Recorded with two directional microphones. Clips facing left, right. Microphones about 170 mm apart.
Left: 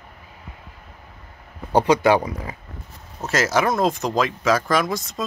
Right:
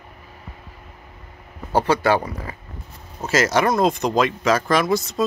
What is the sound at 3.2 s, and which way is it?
Speech, centre (ahead or behind).